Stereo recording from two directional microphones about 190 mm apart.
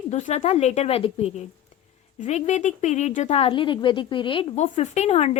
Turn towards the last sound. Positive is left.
turn(degrees=35)  # may be behind; listen again after turning